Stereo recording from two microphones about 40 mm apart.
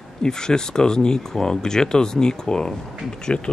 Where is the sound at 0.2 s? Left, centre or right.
Centre.